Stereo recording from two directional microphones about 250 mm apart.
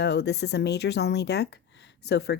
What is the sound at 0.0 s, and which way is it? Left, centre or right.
Speech, left.